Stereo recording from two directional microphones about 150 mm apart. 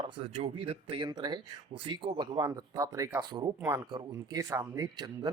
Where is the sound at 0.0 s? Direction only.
40° right (ahead or behind).